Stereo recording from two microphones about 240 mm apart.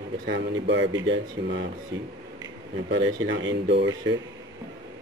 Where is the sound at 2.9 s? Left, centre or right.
Right.